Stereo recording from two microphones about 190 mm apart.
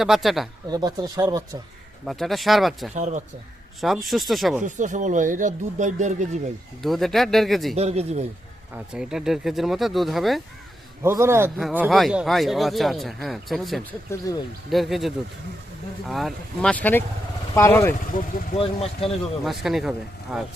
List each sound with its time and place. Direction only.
0.0 s speech: centre (ahead or behind)
0.7 s speech: 20° right (ahead or behind)
2.0 s speech: centre (ahead or behind)
2.9 s speech: 40° right (ahead or behind)
3.8 s speech: centre (ahead or behind)
4.6 s speech: 40° right (ahead or behind)
6.8 s speech: centre (ahead or behind)
7.8 s speech: 35° right (ahead or behind)
8.7 s speech: 5° right (ahead or behind)
11.0 s a man's voice: 15° right (ahead or behind); by 17.9 s 15° left (ahead or behind)
18.6 s speech: 30° left (ahead or behind)
19.5 s speech: centre (ahead or behind)